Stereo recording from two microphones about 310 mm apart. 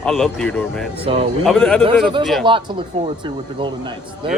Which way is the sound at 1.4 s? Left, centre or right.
Centre.